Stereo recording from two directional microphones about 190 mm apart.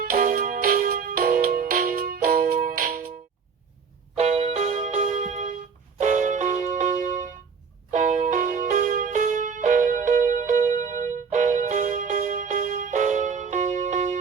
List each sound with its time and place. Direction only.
0.0 s music: 45° right (ahead or behind)
4.1 s music: 35° right (ahead or behind)